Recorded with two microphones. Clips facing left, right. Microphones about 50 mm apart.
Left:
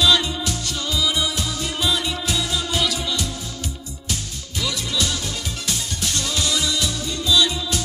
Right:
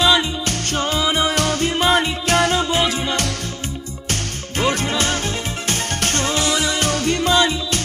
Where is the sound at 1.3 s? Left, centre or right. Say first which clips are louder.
Right 8 dB; right.